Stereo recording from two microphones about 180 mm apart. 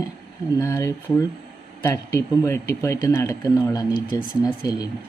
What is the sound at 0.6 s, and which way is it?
Speech, 15° left (ahead or behind).